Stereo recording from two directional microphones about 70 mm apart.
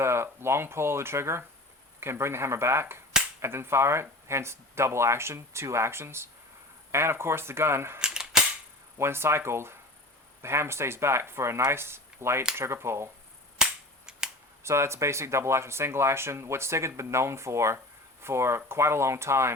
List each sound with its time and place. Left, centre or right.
0.0 s speech: right
7.9 s cap gun: centre
9.0 s speech: right
14.1 s camera: centre
14.6 s speech: right